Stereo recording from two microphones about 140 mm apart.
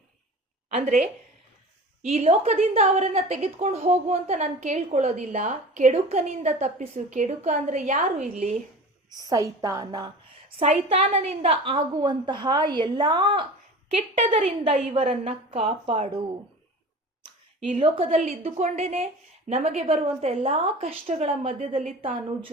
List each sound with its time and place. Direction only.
0.7 s a woman's voice: 60° right (ahead or behind)
2.0 s a woman's voice: 45° right (ahead or behind); by 5.9 s 65° right (ahead or behind)
5.9 s a woman's voice: 50° right (ahead or behind); by 8.5 s 70° right (ahead or behind)
9.1 s a woman's voice: 25° right (ahead or behind)
10.6 s a woman's voice: 45° right (ahead or behind)
13.8 s a woman's voice: 55° right (ahead or behind)
14.9 s a woman's voice: 45° right (ahead or behind)
15.9 s a woman's voice: 35° right (ahead or behind)
17.7 s a woman's voice: 40° right (ahead or behind)
18.2 s a woman's voice: 55° right (ahead or behind)